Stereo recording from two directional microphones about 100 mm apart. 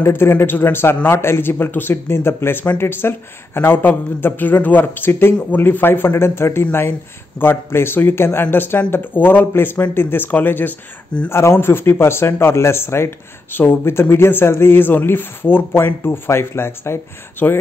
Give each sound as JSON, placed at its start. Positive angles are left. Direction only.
{"t": 0.0, "sound": "speech", "side_deg": 25}